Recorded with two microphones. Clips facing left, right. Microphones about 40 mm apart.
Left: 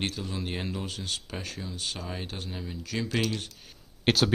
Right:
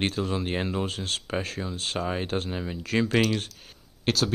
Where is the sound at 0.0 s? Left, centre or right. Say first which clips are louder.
Right 6 dB; right.